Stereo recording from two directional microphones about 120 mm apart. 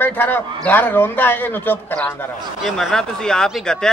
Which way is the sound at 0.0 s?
15° left (ahead or behind).